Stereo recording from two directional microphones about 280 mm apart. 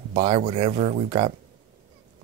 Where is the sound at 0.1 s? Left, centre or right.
Right.